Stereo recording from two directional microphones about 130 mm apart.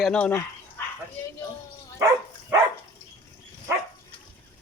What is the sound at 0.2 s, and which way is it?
Speech, 15° left (ahead or behind).